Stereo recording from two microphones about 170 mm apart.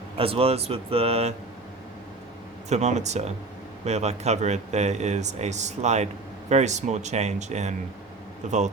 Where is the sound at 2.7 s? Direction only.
40° right (ahead or behind).